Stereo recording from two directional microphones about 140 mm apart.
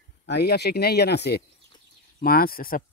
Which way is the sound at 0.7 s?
90° left.